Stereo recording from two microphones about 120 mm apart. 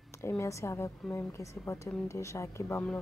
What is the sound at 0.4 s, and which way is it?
A woman's voice, 25° left (ahead or behind).